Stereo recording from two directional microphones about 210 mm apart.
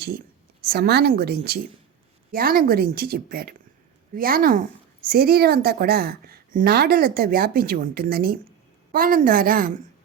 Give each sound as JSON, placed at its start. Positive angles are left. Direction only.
{"t": 0.6, "sound": "a woman's voice", "side_deg": -50}